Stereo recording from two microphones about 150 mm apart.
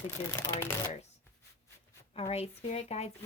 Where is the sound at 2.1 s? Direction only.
45° left (ahead or behind).